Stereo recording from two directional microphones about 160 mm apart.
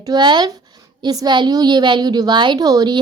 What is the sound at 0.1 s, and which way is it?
A woman's voice, 25° right (ahead or behind).